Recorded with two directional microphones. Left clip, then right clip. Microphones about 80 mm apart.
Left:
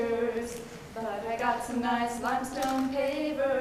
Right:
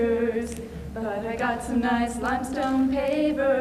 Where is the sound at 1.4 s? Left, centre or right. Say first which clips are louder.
Right 3 dB; right.